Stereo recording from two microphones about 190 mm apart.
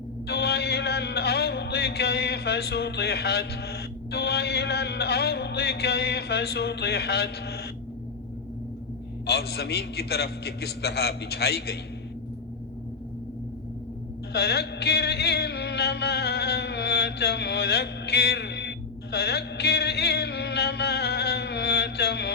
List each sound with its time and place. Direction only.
0.3 s music: 60° left (ahead or behind)
9.2 s music: 55° left (ahead or behind)
14.3 s music: 60° left (ahead or behind)